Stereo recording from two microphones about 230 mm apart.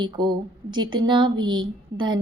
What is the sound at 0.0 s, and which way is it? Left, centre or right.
Speech, centre.